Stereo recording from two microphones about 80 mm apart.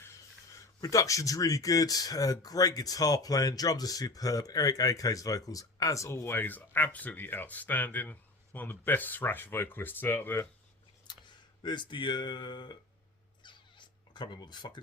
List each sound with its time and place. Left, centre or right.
0.8 s speech: left
6.3 s speech: left
11.1 s speech: left
13.4 s a sound: left